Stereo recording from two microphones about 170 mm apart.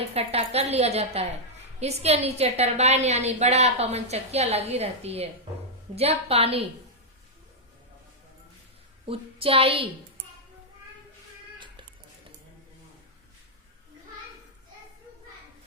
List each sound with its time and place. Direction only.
0.1 s a woman's voice: 35° right (ahead or behind)
9.0 s a woman's voice: 35° right (ahead or behind)